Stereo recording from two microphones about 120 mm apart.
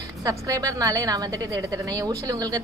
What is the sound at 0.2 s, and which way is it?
A woman's voice, 30° right (ahead or behind).